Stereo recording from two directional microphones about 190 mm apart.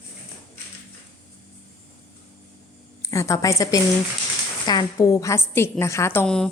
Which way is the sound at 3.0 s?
15° left (ahead or behind).